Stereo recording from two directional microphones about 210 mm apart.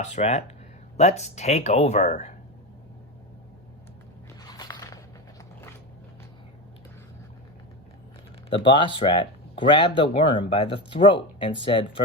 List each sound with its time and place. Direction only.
0.0 s speech: 30° left (ahead or behind)
4.4 s biting: 20° left (ahead or behind)
8.4 s speech: 25° left (ahead or behind)